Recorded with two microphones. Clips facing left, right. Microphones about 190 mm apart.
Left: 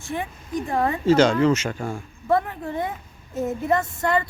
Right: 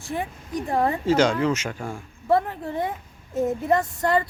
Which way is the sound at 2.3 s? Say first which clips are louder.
Even; 30° right (ahead or behind).